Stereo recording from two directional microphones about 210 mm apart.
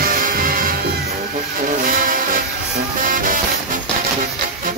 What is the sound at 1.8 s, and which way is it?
Music, 40° right (ahead or behind).